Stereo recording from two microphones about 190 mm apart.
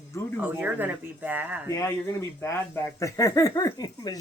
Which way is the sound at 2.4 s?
15° left (ahead or behind).